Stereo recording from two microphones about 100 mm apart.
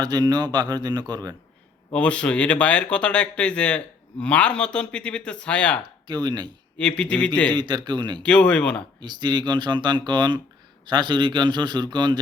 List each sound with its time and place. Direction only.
0.0 s speech: 45° right (ahead or behind)
1.9 s speech: 10° left (ahead or behind)
6.1 s speech: 45° right (ahead or behind)
6.7 s speech: 10° left (ahead or behind)
7.5 s speech: 50° right (ahead or behind)
8.2 s speech: 10° left (ahead or behind)
9.0 s speech: 45° right (ahead or behind)